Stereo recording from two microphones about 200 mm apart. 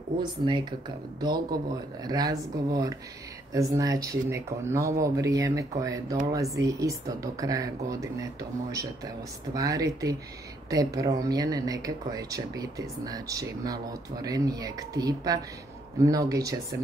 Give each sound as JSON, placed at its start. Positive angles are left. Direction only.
{"t": 0.2, "sound": "speech", "side_deg": -25}